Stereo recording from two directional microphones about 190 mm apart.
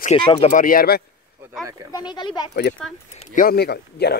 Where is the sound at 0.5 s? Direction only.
45° left (ahead or behind).